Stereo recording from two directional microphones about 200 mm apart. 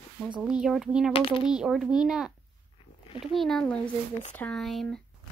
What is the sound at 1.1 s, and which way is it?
Speech, 25° left (ahead or behind).